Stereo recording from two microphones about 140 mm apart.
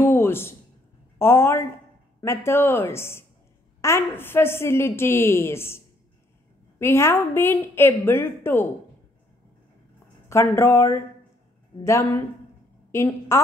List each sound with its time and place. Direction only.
0.0 s a sound: 15° left (ahead or behind)
1.1 s a woman's voice: 15° left (ahead or behind)
6.8 s a woman's voice: 20° left (ahead or behind)
10.2 s a woman's voice: 20° left (ahead or behind)